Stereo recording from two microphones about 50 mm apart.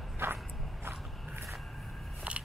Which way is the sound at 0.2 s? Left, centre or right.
Right.